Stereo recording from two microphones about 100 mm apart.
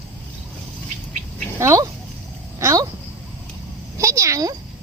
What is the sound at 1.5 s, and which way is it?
A child's voice, 30° right (ahead or behind).